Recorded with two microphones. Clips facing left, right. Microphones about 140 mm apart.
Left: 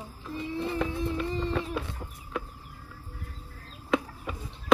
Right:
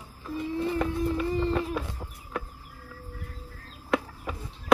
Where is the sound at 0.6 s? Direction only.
5° right (ahead or behind).